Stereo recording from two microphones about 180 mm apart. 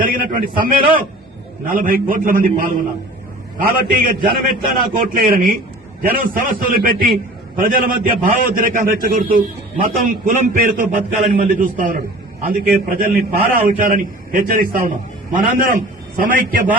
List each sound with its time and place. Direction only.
0.0 s a man's voice: 50° right (ahead or behind)